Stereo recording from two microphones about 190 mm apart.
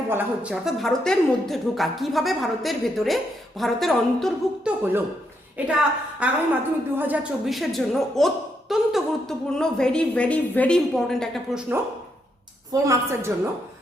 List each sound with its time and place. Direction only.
0.1 s a woman's voice: 10° right (ahead or behind)
12.7 s a woman's voice: 15° right (ahead or behind)